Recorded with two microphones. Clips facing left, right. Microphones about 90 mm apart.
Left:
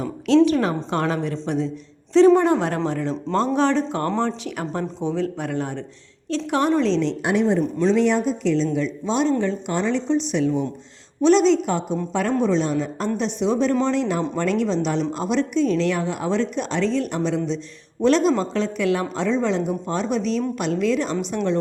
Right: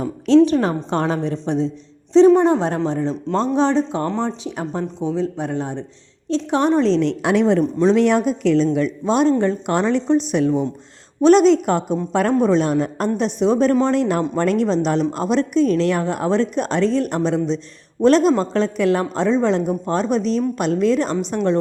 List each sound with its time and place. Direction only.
0.4 s a woman's voice: 35° right (ahead or behind)
4.0 s speech: 10° right (ahead or behind)
4.4 s a woman's voice: 20° right (ahead or behind); by 7.0 s 40° right (ahead or behind)
7.0 s a woman's voice: 75° right (ahead or behind)
7.9 s speech: 65° right (ahead or behind)
13.1 s a woman's voice: 45° right (ahead or behind)